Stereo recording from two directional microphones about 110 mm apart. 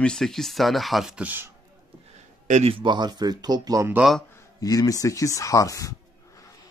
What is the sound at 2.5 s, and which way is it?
Speech, 90° right.